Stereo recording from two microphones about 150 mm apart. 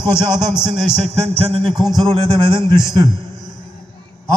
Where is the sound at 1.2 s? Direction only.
40° right (ahead or behind).